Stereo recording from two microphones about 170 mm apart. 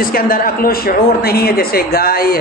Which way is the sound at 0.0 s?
60° left (ahead or behind).